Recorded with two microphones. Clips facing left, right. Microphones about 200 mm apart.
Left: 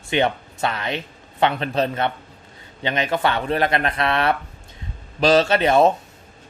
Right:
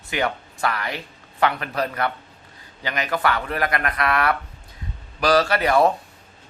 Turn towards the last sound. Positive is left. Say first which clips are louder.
# left 2 dB
turn(degrees=25)  # may be behind; listen again after turning